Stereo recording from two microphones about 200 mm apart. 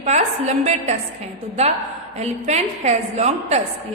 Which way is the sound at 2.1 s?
35° right (ahead or behind).